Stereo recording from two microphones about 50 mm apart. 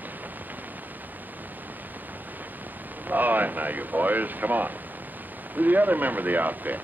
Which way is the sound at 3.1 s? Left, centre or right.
Right.